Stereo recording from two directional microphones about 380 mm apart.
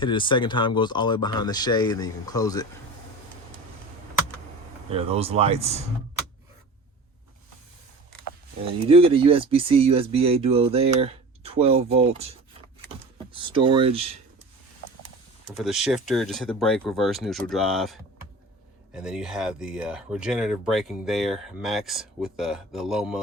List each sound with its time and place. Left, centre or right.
0.0 s speech: centre
4.9 s speech: centre
8.9 s speech: centre
15.5 s speech: centre
18.9 s speech: centre